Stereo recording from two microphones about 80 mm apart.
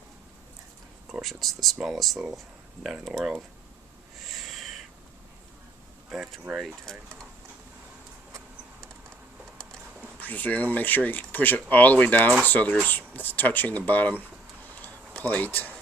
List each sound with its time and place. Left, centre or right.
1.2 s speech: centre
4.2 s owl: centre
6.1 s speech: centre
10.2 s speech: left
14.6 s a sound: left